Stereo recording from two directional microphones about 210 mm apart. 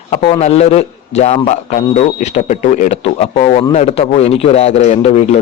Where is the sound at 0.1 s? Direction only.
30° left (ahead or behind).